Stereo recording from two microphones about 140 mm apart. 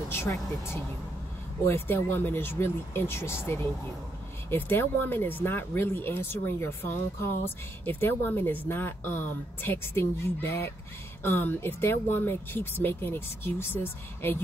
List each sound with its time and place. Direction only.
0.1 s speech: 20° left (ahead or behind)
4.5 s speech: 15° left (ahead or behind)